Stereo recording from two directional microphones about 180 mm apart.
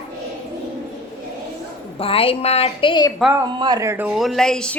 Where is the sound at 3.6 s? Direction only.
20° right (ahead or behind); by 4.8 s 5° left (ahead or behind).